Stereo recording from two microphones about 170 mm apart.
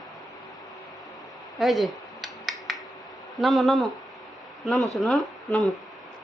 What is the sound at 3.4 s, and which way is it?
Speech, centre (ahead or behind).